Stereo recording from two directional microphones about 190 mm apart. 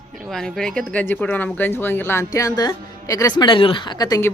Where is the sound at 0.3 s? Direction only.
Centre (ahead or behind).